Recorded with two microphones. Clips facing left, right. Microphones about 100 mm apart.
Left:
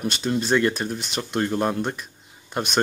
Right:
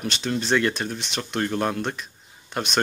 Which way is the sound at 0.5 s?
10° left (ahead or behind).